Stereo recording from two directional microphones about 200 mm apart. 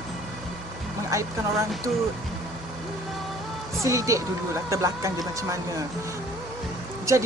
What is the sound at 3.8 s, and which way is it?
Speech, 15° right (ahead or behind).